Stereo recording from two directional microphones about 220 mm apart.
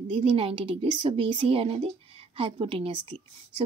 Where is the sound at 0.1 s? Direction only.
25° right (ahead or behind).